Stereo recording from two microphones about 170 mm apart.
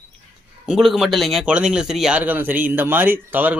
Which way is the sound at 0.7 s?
Centre (ahead or behind).